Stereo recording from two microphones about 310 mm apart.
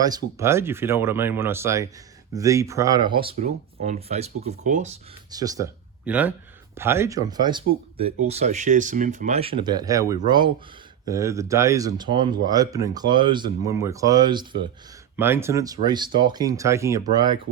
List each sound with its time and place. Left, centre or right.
0.0 s speech: centre
5.3 s speech: centre